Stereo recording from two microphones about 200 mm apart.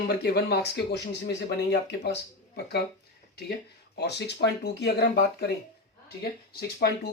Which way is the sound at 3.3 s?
55° left (ahead or behind).